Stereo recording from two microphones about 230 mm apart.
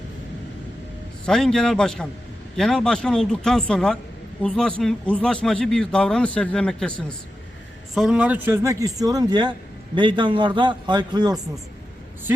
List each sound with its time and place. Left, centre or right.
1.2 s a man's voice: centre
7.9 s a man's voice: centre